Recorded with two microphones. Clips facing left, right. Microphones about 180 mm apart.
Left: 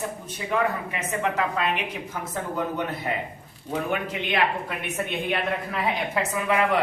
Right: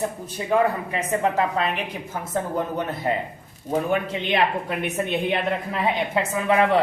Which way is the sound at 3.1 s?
35° right (ahead or behind).